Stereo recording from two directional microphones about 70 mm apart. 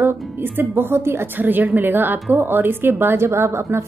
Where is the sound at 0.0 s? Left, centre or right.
Right.